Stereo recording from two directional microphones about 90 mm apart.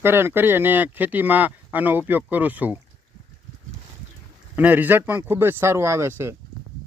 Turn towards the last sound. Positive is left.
turn(degrees=-30)  # may be behind; listen again after turning